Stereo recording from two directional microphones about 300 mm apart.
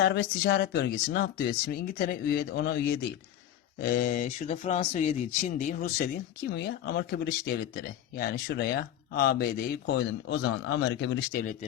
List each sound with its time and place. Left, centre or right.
0.0 s speech: left